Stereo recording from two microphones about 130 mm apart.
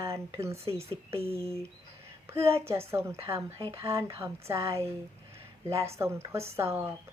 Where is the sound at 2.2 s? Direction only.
20° right (ahead or behind).